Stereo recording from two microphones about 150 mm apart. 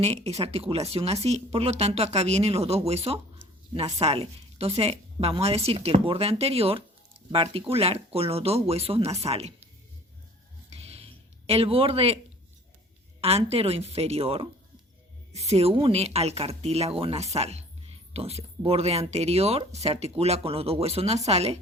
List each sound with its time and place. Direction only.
0.0 s a woman's voice: 45° right (ahead or behind)
10.7 s a sound: 40° right (ahead or behind)
13.2 s a woman's voice: 40° right (ahead or behind)